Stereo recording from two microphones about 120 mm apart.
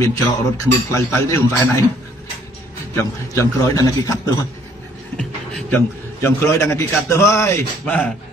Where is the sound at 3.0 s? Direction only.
25° left (ahead or behind).